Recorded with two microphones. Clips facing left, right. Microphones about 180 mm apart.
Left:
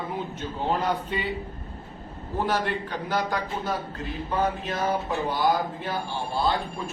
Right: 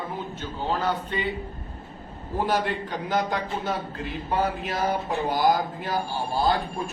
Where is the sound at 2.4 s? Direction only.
15° right (ahead or behind).